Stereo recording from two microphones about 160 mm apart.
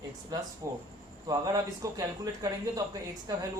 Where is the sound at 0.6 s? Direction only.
20° right (ahead or behind).